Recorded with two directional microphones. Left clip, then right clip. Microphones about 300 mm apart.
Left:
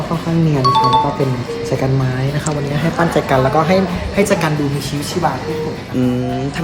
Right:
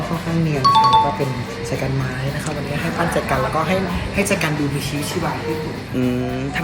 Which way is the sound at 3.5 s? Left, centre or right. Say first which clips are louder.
Left 6 dB; left.